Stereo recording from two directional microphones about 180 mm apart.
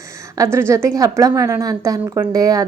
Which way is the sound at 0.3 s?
15° right (ahead or behind).